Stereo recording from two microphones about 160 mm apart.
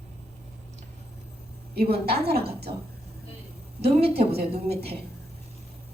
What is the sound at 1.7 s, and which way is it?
Speech, 80° right.